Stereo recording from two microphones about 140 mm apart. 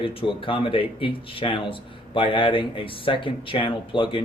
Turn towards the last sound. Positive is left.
turn(degrees=40)  # may be behind; listen again after turning